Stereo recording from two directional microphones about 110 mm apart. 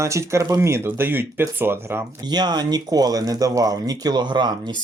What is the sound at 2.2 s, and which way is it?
Speech, 40° right (ahead or behind).